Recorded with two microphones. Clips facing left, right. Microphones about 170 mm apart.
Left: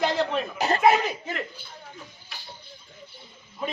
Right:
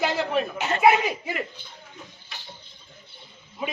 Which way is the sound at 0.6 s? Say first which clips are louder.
Left 2 dB; 35° left (ahead or behind).